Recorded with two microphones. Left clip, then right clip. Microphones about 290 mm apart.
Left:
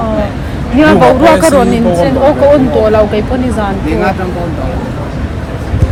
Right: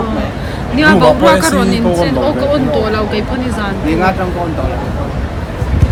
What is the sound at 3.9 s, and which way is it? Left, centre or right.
Speech, centre.